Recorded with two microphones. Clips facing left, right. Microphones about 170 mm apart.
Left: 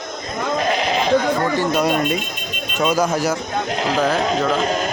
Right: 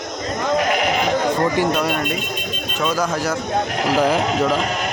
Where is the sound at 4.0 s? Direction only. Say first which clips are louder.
Right 1 dB; 5° right (ahead or behind).